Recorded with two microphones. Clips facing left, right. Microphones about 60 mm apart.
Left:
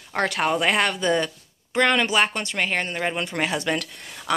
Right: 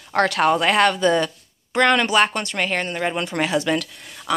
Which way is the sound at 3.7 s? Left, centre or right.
Left.